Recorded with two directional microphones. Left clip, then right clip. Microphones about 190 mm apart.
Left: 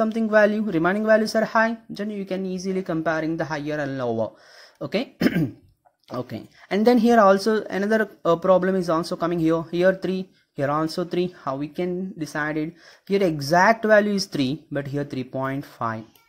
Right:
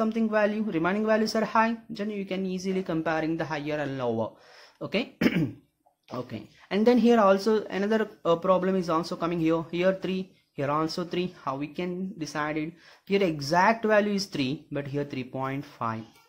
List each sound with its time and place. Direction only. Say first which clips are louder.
0.0 s speech: left 7 dB; 25° left (ahead or behind)